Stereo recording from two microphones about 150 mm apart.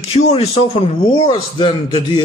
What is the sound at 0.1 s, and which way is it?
Speech, 40° left (ahead or behind).